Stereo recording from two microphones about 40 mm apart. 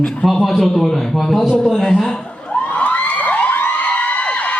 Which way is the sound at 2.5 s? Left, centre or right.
Left.